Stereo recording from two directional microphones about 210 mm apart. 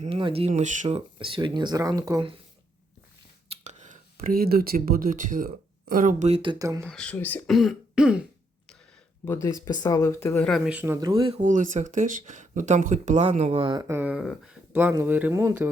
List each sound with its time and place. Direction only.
0.0 s speech: 25° right (ahead or behind)
3.6 s speech: 35° right (ahead or behind); by 6.8 s 15° right (ahead or behind)
6.8 s speech: 5° left (ahead or behind)
9.2 s speech: 15° left (ahead or behind)
10.7 s speech: 10° right (ahead or behind)
11.3 s speech: 35° right (ahead or behind); by 15.7 s 10° right (ahead or behind)